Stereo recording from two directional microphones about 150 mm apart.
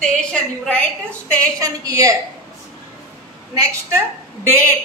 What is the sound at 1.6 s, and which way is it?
Speech, 25° right (ahead or behind).